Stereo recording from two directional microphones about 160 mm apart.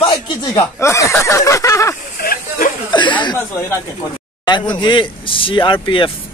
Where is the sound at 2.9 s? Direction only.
30° left (ahead or behind).